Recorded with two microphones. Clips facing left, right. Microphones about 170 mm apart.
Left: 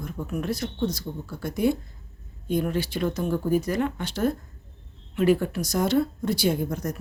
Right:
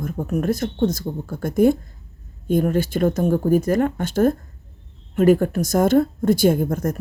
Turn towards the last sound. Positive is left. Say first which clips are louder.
# right 6 dB
turn(degrees=-50)  # may be behind; listen again after turning